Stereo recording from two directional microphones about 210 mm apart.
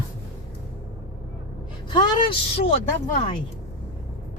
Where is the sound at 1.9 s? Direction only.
25° left (ahead or behind).